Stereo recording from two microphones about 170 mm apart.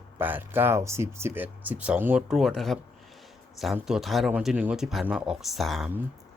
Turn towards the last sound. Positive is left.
turn(degrees=0)  # may be behind; listen again after turning